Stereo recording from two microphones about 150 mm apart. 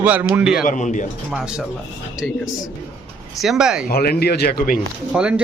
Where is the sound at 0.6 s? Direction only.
60° left (ahead or behind).